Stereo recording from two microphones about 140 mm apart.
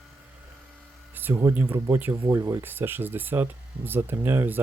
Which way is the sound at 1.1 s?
15° right (ahead or behind).